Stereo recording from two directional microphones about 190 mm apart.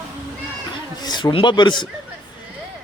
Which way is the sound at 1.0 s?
25° left (ahead or behind).